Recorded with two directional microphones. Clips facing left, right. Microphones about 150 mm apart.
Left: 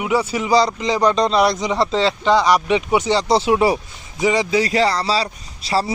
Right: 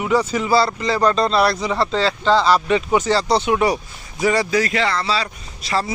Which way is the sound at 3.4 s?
25° left (ahead or behind).